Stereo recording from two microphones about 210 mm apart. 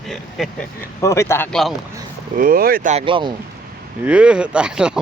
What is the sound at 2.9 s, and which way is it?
Speech, 25° right (ahead or behind).